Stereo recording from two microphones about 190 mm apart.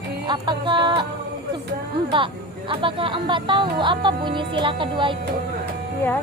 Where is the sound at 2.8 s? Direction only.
25° right (ahead or behind).